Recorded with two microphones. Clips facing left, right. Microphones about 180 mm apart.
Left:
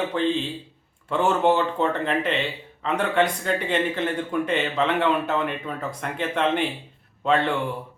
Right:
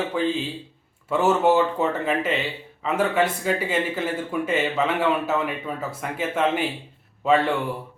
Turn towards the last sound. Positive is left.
turn(degrees=-5)  # may be behind; listen again after turning